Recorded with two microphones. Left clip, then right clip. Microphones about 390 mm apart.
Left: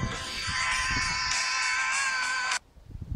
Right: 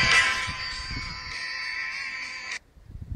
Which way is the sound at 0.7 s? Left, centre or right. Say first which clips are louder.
Left 7 dB; centre.